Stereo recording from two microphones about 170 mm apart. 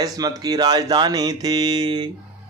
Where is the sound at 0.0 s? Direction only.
20° right (ahead or behind).